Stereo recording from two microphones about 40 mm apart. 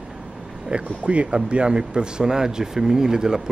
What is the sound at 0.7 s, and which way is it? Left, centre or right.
Speech, right.